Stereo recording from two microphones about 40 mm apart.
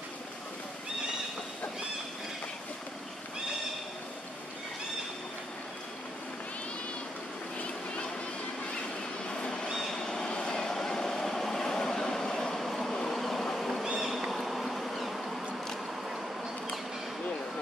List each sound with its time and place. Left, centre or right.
9.3 s a sound: left
9.9 s vehicle: centre
13.9 s bee: centre